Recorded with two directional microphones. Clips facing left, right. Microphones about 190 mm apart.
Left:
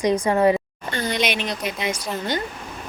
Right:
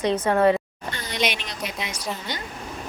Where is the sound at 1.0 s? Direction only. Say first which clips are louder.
Left 3 dB; 55° left (ahead or behind).